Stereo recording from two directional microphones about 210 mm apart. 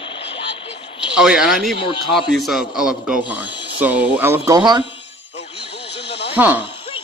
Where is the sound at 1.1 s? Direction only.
5° right (ahead or behind).